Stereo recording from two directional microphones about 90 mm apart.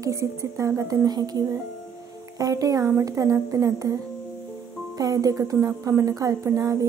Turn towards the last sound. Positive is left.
turn(degrees=-40)  # may be behind; listen again after turning